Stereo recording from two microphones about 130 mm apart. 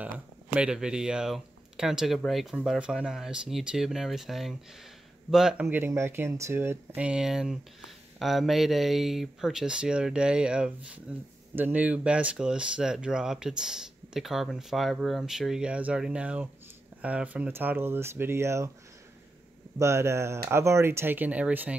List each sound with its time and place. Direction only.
0.6 s speech: 5° right (ahead or behind)
5.7 s speech: 20° right (ahead or behind)
19.8 s speech: 20° right (ahead or behind)